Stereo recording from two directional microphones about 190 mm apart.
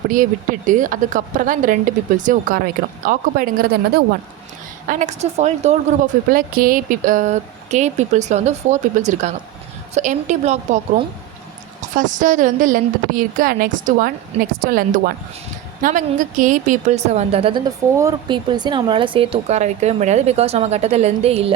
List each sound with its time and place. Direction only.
0.1 s speech: 45° right (ahead or behind)
4.9 s speech: 40° right (ahead or behind)
17.9 s speech: 20° right (ahead or behind)